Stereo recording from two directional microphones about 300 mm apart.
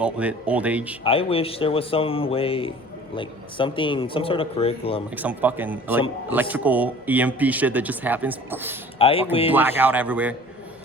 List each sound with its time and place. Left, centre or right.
0.0 s a man's voice: centre
1.0 s speech: centre
5.1 s a man's voice: centre
9.0 s speech: centre
9.5 s a man's voice: centre